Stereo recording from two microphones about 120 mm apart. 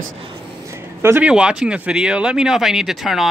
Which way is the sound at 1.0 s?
20° right (ahead or behind).